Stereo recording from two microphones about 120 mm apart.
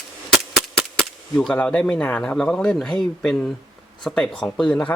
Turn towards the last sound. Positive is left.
turn(degrees=10)  # may be behind; listen again after turning